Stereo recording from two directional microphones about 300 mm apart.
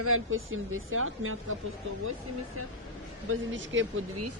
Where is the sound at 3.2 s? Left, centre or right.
Right.